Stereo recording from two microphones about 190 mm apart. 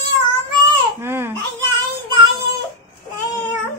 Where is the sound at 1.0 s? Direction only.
10° right (ahead or behind).